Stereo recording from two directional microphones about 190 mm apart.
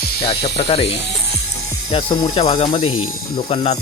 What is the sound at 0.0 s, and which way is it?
Snake, 55° left (ahead or behind).